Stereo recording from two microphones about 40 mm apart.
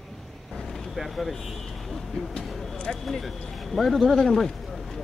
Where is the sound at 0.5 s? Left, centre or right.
Centre.